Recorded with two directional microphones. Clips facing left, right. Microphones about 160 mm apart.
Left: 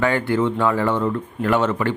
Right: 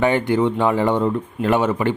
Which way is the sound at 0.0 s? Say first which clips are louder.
Right 2 dB; 20° right (ahead or behind).